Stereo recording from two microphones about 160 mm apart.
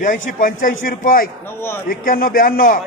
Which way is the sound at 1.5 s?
15° left (ahead or behind).